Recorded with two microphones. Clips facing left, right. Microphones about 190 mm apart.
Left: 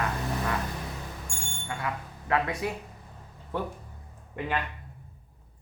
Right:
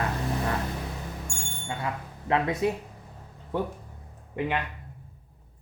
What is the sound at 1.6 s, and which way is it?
Speech, 25° right (ahead or behind).